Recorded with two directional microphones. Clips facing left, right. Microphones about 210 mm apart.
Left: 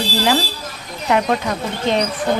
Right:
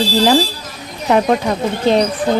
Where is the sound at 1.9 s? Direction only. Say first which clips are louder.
Right 5 dB; 35° right (ahead or behind).